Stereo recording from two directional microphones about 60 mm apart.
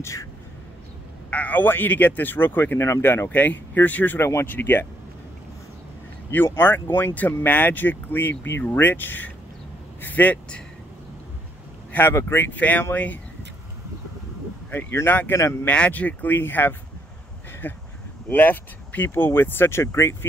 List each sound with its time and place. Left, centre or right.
0.0 s a sound: left
1.3 s speech: left
2.9 s speech: left
3.3 s speech: left
4.2 s speech: left
4.5 s speech: left
6.3 s a man's voice: left
11.9 s speech: left
12.4 s speech: left
14.7 s speech: left
15.6 s speech: left